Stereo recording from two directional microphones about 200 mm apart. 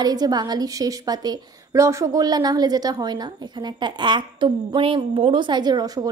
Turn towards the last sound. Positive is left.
turn(degrees=-20)  # may be behind; listen again after turning